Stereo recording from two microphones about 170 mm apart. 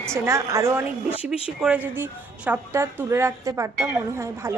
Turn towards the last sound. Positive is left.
turn(degrees=-15)  # may be behind; listen again after turning